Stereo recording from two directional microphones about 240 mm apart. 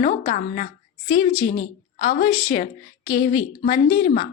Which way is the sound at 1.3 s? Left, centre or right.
Centre.